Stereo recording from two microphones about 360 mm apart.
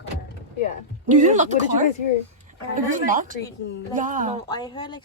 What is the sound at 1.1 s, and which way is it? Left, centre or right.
Speech, right.